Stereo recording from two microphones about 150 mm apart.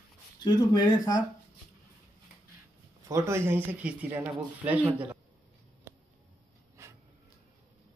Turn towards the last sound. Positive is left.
turn(degrees=-20)  # may be behind; listen again after turning